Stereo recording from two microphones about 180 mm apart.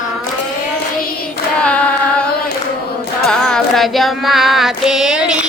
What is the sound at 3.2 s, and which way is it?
Music, 5° left (ahead or behind).